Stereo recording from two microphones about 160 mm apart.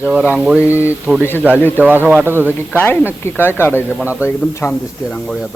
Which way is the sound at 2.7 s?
10° left (ahead or behind).